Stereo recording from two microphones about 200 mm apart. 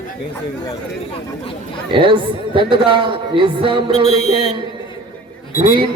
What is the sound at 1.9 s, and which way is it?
A man's voice, 25° right (ahead or behind).